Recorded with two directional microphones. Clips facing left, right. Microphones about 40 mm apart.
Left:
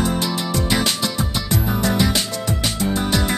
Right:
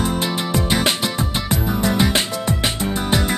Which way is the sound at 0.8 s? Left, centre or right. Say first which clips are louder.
Right 2 dB; right.